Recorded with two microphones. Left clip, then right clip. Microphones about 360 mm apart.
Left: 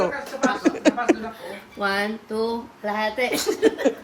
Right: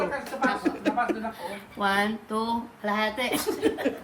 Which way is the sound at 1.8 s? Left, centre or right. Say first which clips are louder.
Left 1 dB; centre.